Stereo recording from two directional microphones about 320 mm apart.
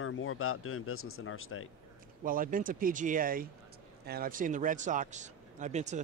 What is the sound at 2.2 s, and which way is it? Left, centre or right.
Speech, right.